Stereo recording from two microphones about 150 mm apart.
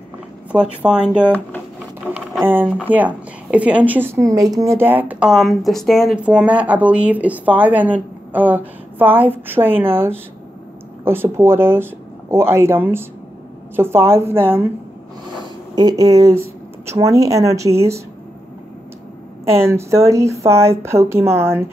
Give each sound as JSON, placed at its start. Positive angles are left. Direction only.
{"t": 0.5, "sound": "speech", "side_deg": -5}
{"t": 2.4, "sound": "speech", "side_deg": -10}
{"t": 15.7, "sound": "speech", "side_deg": -25}
{"t": 19.6, "sound": "speech", "side_deg": -15}